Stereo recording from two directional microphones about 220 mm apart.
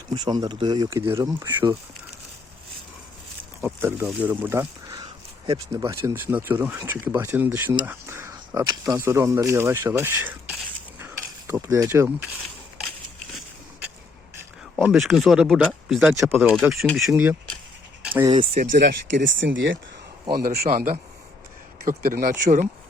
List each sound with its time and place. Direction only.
0.1 s speech: 20° right (ahead or behind)
3.6 s speech: 10° right (ahead or behind)
11.0 s mechanisms: 10° right (ahead or behind)
14.8 s speech: centre (ahead or behind)
17.1 s speech: 10° right (ahead or behind)
18.0 s a sound: 5° right (ahead or behind)
18.3 s speech: 25° right (ahead or behind)
18.6 s speech: 40° right (ahead or behind)
19.5 s speech: 60° right (ahead or behind)
20.3 s speech: 45° right (ahead or behind)